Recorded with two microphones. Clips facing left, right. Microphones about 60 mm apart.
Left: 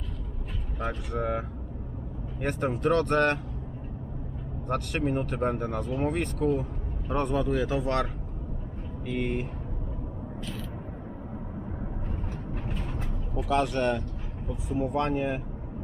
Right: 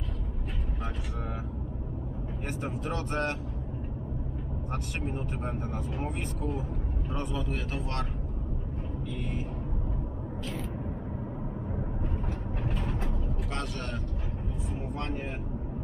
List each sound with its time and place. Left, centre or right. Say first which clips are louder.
0.8 s speech: left 11 dB; left
4.7 s speech: left 9 dB; left
9.0 s speech: left 8 dB; left
12.6 s mechanisms: right 5 dB; centre
13.6 s speech: left 13 dB; left
14.8 s speech: left 11 dB; left